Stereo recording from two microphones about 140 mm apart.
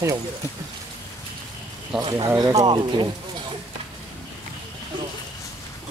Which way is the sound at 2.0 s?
30° right (ahead or behind).